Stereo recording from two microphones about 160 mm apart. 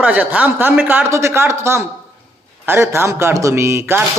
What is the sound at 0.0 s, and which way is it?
Speech, 10° right (ahead or behind).